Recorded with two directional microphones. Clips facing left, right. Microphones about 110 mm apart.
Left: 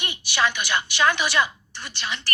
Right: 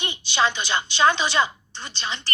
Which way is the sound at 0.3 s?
20° right (ahead or behind).